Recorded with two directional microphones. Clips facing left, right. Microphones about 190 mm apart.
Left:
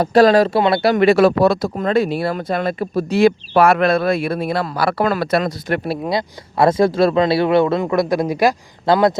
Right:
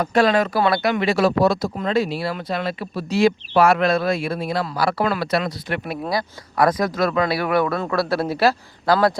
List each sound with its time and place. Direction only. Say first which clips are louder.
0.0 s speech: left 6 dB; 35° left (ahead or behind)
0.9 s speech: left 6 dB; 60° left (ahead or behind)
5.8 s speech: left 4 dB; 25° left (ahead or behind)